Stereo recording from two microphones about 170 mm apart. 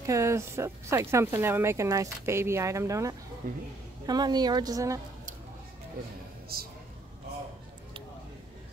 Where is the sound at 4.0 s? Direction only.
25° right (ahead or behind).